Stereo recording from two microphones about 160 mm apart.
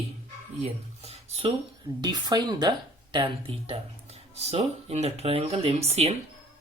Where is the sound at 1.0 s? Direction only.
40° right (ahead or behind).